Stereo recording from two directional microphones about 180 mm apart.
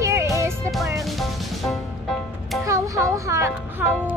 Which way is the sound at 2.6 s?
15° right (ahead or behind).